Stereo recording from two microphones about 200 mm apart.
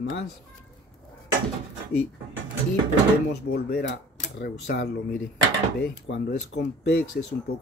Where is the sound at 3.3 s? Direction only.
50° left (ahead or behind).